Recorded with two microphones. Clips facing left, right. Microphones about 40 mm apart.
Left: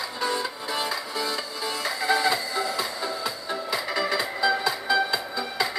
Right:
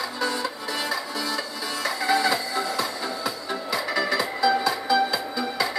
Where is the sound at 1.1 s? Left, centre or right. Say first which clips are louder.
Right 1 dB; left.